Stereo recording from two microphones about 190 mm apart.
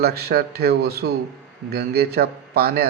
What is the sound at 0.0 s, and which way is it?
A man's voice, 55° right (ahead or behind).